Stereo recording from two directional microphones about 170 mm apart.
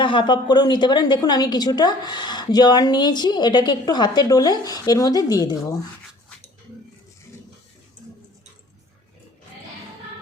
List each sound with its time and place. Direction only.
0.0 s a woman's voice: 30° left (ahead or behind)